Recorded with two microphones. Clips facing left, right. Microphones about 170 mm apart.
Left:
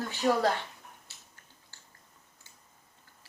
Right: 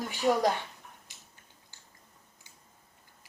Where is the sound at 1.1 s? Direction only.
15° right (ahead or behind).